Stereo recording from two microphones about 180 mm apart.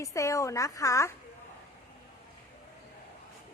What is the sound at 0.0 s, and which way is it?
A woman's voice, 15° left (ahead or behind).